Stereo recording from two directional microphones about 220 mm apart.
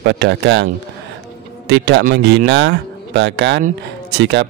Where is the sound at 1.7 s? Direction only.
50° right (ahead or behind).